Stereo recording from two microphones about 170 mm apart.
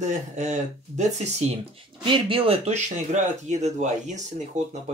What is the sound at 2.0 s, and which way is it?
Speech, 30° right (ahead or behind).